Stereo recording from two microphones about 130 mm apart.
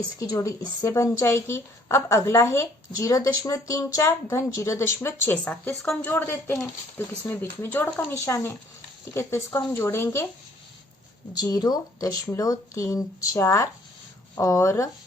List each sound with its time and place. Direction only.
0.2 s speech: 25° left (ahead or behind)
11.3 s speech: 30° left (ahead or behind)